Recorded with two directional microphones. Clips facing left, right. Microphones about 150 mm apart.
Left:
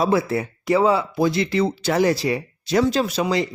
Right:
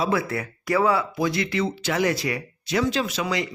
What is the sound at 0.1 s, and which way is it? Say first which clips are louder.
Speech: left 5 dB; 25° left (ahead or behind).